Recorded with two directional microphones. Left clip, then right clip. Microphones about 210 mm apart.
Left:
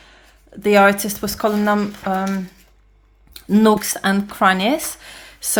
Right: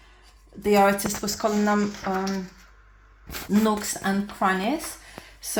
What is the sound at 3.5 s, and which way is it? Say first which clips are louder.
Speech: left 9 dB; 25° left (ahead or behind).